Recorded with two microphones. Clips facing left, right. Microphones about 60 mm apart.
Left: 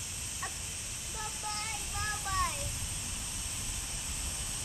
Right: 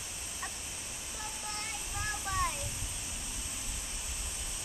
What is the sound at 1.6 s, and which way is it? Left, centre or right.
Child singing, centre.